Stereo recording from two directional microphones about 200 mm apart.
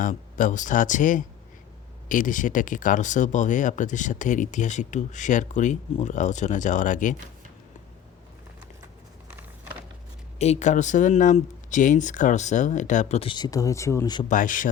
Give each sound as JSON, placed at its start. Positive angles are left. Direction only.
{"t": 0.0, "sound": "speech", "side_deg": 40}
{"t": 10.3, "sound": "speech", "side_deg": 35}
{"t": 14.3, "sound": "speech", "side_deg": 40}